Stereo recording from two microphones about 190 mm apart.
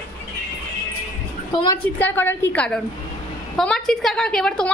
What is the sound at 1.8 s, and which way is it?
A woman's voice, 10° left (ahead or behind).